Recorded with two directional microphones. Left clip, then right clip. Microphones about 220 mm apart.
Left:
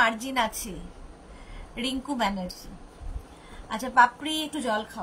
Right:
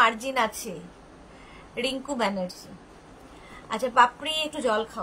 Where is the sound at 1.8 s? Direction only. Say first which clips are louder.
Right 1 dB; 10° right (ahead or behind).